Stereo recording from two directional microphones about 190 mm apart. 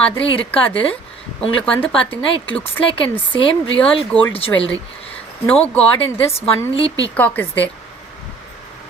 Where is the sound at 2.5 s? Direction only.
30° left (ahead or behind).